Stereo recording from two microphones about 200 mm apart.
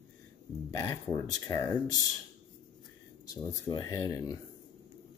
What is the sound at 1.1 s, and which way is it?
Speech, 15° left (ahead or behind).